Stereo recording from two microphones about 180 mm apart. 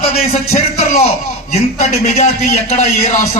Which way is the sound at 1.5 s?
40° left (ahead or behind).